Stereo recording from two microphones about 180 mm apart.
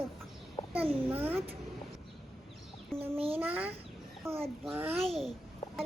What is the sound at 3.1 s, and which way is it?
Speech, 30° right (ahead or behind).